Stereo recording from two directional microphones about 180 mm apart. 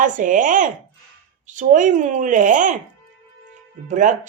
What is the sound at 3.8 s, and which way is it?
Speech, 45° right (ahead or behind).